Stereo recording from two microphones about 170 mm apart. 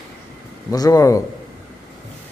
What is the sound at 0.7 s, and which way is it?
Speech, 20° left (ahead or behind).